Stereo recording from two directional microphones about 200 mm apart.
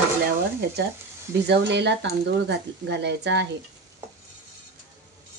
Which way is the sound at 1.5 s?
60° right (ahead or behind).